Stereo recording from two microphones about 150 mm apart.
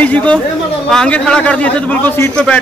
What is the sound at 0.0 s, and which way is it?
A man's voice, 10° left (ahead or behind).